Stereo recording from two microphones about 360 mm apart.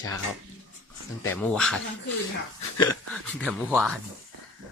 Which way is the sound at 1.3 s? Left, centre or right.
Centre.